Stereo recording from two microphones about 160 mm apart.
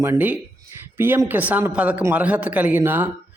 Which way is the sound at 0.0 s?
15° right (ahead or behind).